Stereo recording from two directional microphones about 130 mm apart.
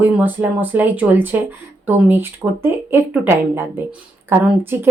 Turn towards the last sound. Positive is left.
turn(degrees=-15)  # may be behind; listen again after turning